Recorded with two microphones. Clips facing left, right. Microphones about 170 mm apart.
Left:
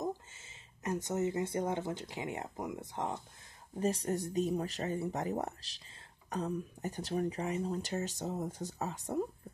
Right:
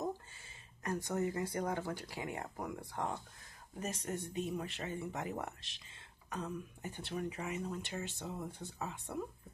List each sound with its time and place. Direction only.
0.8 s speech: 20° left (ahead or behind)
3.8 s speech: 35° left (ahead or behind)